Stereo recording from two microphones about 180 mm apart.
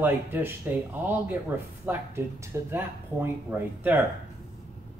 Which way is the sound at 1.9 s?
10° right (ahead or behind).